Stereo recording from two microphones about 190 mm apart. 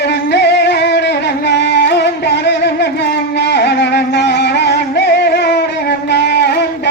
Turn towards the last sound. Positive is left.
turn(degrees=60)  # may be behind; listen again after turning